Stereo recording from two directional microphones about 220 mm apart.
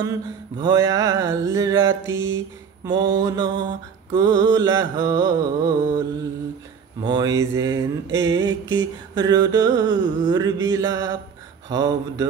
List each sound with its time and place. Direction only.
0.6 s mantra: 15° right (ahead or behind)